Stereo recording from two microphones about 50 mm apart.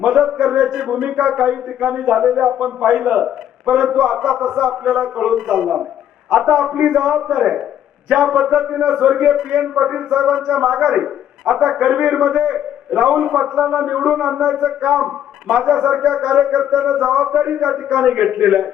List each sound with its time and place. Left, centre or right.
0.0 s a sound: centre
1.0 s a man's voice: centre
13.4 s a man's voice: centre